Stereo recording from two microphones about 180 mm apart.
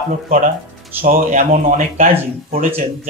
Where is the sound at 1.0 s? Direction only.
45° right (ahead or behind).